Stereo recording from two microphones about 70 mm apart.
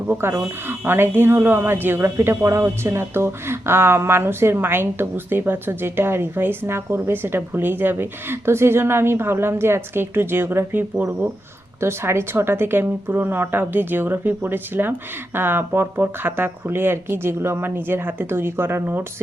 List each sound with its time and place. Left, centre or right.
0.1 s speech: right
11.8 s speech: right